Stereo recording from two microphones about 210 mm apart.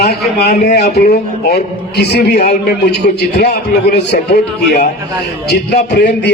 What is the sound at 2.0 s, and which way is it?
A man's voice, 50° left (ahead or behind).